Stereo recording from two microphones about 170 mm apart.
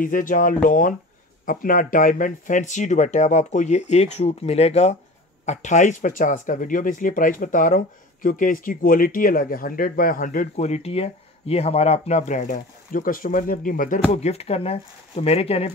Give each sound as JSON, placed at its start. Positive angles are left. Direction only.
{"t": 0.0, "sound": "speech", "side_deg": 50}